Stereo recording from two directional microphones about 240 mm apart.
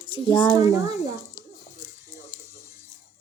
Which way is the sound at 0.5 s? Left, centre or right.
Centre.